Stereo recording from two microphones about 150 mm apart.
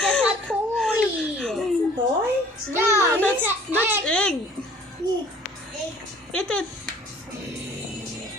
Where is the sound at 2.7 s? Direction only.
15° right (ahead or behind).